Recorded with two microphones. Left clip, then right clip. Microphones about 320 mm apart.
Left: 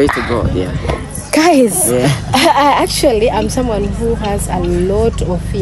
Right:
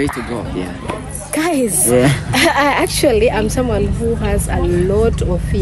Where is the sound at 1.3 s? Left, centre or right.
Centre.